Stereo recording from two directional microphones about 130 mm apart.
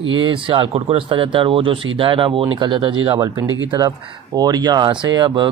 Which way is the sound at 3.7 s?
30° right (ahead or behind).